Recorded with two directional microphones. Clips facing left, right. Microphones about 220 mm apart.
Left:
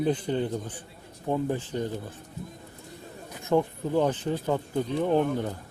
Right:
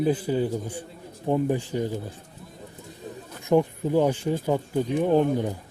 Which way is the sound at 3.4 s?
15° right (ahead or behind).